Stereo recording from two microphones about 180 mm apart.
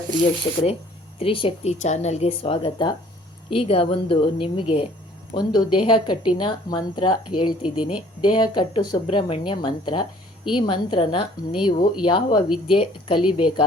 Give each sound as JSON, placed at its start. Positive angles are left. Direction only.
{"t": 1.2, "sound": "a woman's voice", "side_deg": 30}
{"t": 7.6, "sound": "speech", "side_deg": -5}
{"t": 8.2, "sound": "a woman's voice", "side_deg": 25}